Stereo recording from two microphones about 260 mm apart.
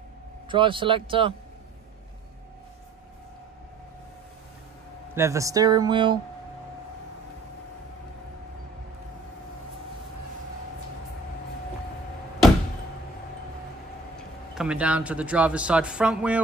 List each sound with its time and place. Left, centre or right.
0.5 s speech: centre
5.1 s speech: centre
14.1 s speech: centre